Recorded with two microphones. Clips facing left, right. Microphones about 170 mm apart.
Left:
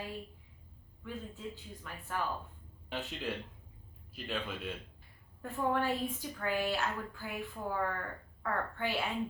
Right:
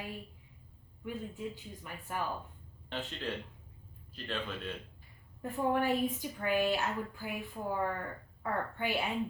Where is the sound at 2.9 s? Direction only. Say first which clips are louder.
Even; 10° left (ahead or behind).